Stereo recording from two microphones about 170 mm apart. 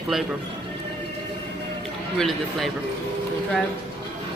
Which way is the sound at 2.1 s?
Centre (ahead or behind).